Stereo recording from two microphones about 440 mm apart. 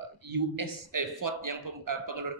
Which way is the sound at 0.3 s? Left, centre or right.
Right.